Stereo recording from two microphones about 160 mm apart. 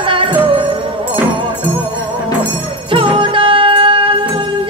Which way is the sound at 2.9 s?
30° right (ahead or behind).